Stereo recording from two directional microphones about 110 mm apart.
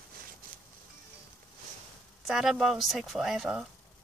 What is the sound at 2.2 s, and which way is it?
Speech, 5° right (ahead or behind).